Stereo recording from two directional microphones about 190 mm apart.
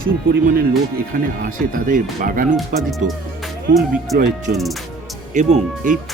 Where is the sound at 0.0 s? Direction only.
50° right (ahead or behind).